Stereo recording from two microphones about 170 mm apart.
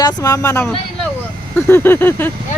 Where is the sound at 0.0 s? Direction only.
25° left (ahead or behind).